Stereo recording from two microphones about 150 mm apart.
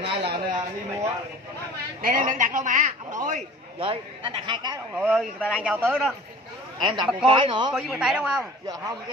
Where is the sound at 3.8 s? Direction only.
35° right (ahead or behind).